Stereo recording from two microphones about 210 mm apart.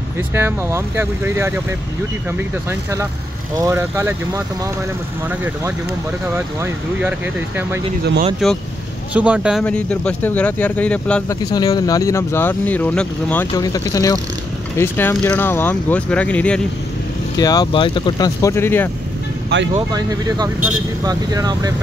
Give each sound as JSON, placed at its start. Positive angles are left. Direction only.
{"t": 0.3, "sound": "speech", "side_deg": -10}
{"t": 2.7, "sound": "speech", "side_deg": -10}
{"t": 6.3, "sound": "speech", "side_deg": -10}
{"t": 11.5, "sound": "speech", "side_deg": 20}
{"t": 13.5, "sound": "speech", "side_deg": 15}
{"t": 17.4, "sound": "speech", "side_deg": 20}
{"t": 19.5, "sound": "speech", "side_deg": -50}
{"t": 19.9, "sound": "speech", "side_deg": -15}